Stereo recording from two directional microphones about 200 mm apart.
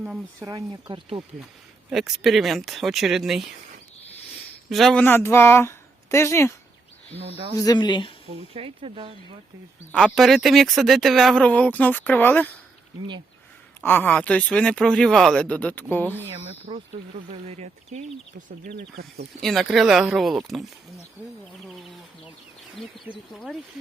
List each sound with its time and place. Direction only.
0.3 s speech: 15° right (ahead or behind)
1.9 s speech: centre (ahead or behind)
4.7 s speech: centre (ahead or behind)
7.1 s speech: 30° right (ahead or behind)
7.5 s speech: 20° left (ahead or behind)
8.5 s speech: 30° right (ahead or behind)
9.9 s speech: centre (ahead or behind)
13.8 s speech: 10° left (ahead or behind)
16.4 s speech: 30° right (ahead or behind); by 19.3 s 50° right (ahead or behind)
19.4 s speech: centre (ahead or behind)
21.7 s speech: centre (ahead or behind)
23.0 s speech: centre (ahead or behind)